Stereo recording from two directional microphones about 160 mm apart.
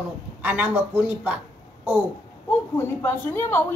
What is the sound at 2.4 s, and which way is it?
Speech, 15° left (ahead or behind).